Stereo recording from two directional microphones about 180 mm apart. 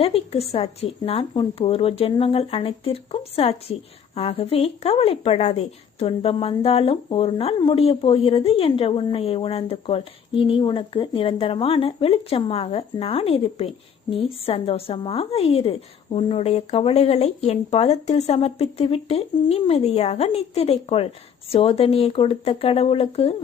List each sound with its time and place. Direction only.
0.0 s speech: 35° left (ahead or behind)